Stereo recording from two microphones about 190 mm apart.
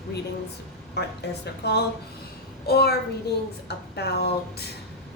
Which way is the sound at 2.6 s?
55° left (ahead or behind).